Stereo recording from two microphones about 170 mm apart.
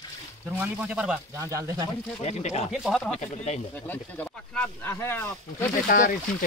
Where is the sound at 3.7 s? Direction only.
10° left (ahead or behind).